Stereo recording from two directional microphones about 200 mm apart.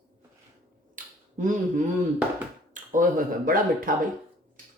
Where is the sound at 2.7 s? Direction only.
40° right (ahead or behind).